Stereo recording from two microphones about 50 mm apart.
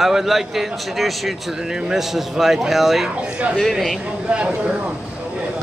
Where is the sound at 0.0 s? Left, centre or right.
Centre.